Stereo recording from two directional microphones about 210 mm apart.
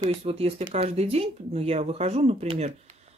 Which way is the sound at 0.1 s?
30° right (ahead or behind).